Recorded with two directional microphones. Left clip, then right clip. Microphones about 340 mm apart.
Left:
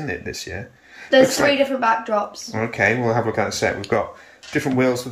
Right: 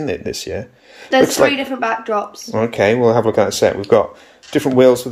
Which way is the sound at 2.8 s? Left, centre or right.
Right.